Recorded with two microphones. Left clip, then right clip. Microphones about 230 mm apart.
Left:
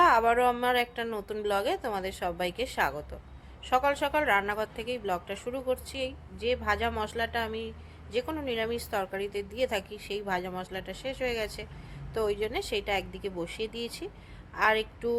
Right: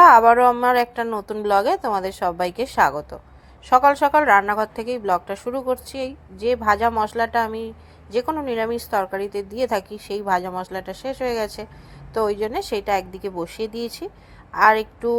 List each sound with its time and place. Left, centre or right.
0.0 s a woman's voice: centre